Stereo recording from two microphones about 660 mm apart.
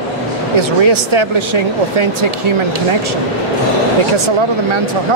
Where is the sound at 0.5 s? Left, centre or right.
Right.